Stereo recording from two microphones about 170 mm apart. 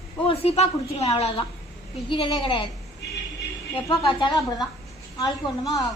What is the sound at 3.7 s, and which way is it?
Speech, 30° left (ahead or behind).